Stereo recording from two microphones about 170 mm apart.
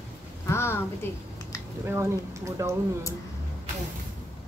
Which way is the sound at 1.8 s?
15° right (ahead or behind).